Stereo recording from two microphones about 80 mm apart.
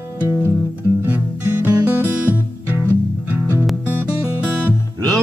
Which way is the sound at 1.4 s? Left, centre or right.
Right.